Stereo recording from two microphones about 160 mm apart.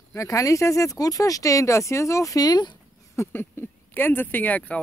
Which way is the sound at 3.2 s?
15° left (ahead or behind).